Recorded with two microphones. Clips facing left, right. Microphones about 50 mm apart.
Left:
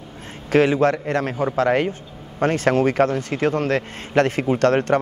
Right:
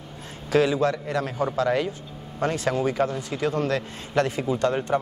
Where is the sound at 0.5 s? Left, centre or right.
Left.